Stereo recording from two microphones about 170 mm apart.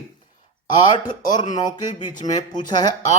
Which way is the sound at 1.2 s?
25° left (ahead or behind).